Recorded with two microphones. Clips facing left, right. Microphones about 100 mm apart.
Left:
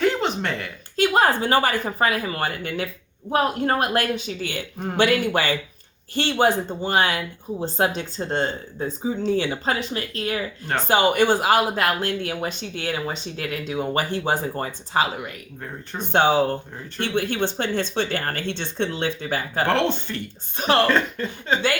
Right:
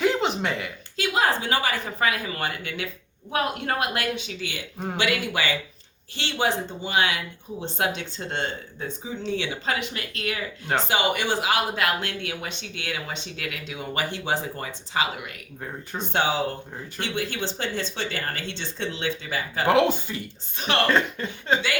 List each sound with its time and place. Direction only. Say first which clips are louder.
0.0 s a sound: left 1 dB; centre (ahead or behind)
0.9 s speech: left 5 dB; 45° left (ahead or behind)
16.1 s speech: left 6 dB; 55° left (ahead or behind)
19.6 s speech: right 3 dB; 5° right (ahead or behind)